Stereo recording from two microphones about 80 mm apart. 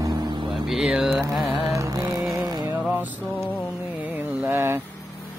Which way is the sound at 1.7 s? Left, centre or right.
Right.